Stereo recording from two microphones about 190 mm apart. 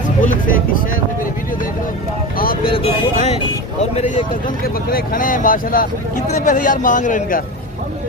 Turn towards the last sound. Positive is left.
turn(degrees=45)  # may be behind; listen again after turning